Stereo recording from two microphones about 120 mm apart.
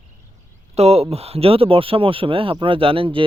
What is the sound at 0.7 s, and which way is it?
Speech, 60° right (ahead or behind).